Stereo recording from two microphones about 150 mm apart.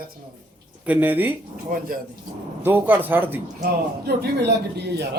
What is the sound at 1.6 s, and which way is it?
Speech, 65° right (ahead or behind).